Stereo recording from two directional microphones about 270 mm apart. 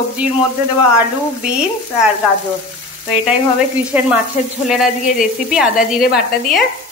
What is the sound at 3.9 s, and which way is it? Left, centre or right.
Sizzle, centre.